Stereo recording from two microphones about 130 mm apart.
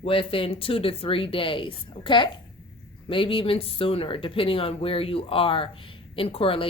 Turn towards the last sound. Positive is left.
turn(degrees=45)  # may be behind; listen again after turning